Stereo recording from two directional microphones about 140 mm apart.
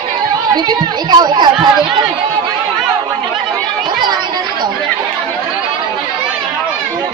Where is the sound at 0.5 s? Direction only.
30° right (ahead or behind).